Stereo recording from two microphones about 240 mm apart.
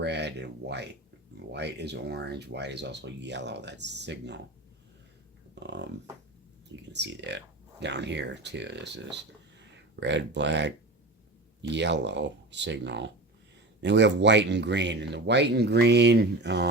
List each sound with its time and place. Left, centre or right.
0.0 s speech: right
5.5 s speech: right
6.9 s speech: right